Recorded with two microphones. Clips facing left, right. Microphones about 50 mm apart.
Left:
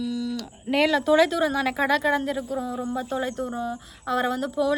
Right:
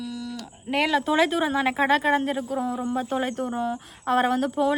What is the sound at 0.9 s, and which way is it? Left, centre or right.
Speech, right.